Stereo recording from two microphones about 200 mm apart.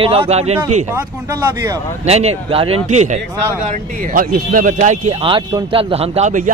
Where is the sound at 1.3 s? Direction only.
15° right (ahead or behind).